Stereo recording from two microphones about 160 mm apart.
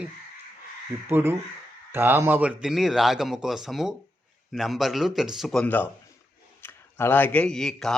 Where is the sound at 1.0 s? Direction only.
15° right (ahead or behind).